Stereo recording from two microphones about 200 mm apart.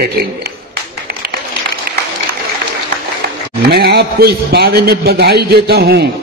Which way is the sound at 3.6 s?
55° right (ahead or behind).